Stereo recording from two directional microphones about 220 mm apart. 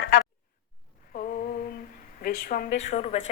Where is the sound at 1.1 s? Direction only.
40° left (ahead or behind).